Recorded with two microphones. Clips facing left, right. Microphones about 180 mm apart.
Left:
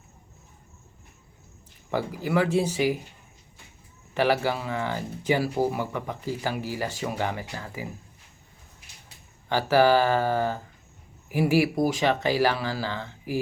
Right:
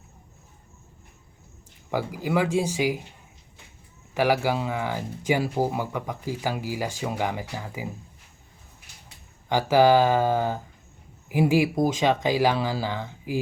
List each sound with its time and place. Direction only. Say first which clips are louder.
1.9 s speech: even; 15° right (ahead or behind)
4.1 s speech: right 1 dB; 10° right (ahead or behind)
9.5 s speech: right 2 dB; 15° right (ahead or behind)